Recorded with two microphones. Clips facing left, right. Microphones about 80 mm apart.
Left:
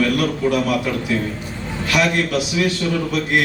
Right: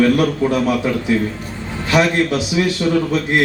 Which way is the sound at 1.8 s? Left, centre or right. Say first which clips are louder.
Right 4 dB; right.